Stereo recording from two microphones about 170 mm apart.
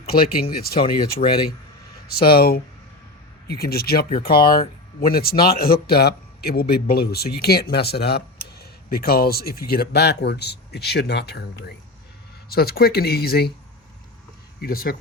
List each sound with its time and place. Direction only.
0.2 s speech: 60° left (ahead or behind)
1.2 s speech: 40° left (ahead or behind)
2.0 s a man's voice: 65° left (ahead or behind)
14.6 s speech: 60° left (ahead or behind)